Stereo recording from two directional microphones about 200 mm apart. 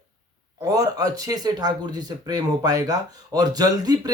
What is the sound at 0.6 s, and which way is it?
Speech, 15° right (ahead or behind).